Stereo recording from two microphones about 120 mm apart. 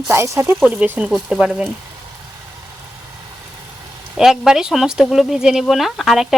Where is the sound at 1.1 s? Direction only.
Centre (ahead or behind).